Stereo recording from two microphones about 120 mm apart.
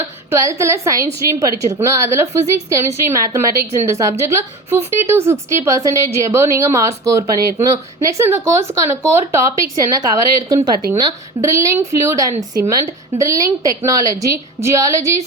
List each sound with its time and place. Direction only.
0.3 s speech: 25° right (ahead or behind)